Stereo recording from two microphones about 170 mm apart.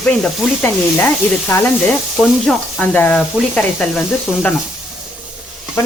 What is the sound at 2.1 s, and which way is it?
Speech, centre (ahead or behind).